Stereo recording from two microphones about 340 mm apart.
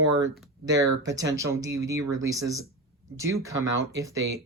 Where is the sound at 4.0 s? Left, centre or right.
Centre.